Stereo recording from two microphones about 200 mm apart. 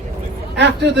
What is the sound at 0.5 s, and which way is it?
Speech, 60° right (ahead or behind).